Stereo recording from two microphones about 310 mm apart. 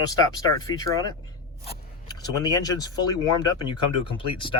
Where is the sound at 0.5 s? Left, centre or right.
Centre.